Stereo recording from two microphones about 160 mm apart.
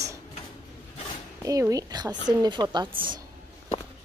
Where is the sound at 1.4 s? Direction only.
20° right (ahead or behind).